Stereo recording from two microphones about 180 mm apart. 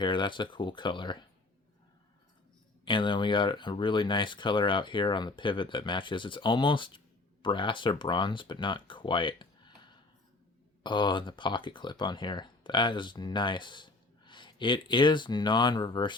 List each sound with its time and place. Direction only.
0.0 s speech: 25° left (ahead or behind)
2.8 s speech: 25° left (ahead or behind)